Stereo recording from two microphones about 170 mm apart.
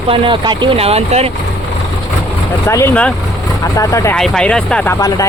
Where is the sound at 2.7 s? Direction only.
10° left (ahead or behind).